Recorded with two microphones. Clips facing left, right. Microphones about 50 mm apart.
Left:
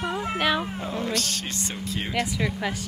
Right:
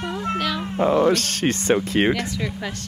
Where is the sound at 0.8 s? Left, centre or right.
Right.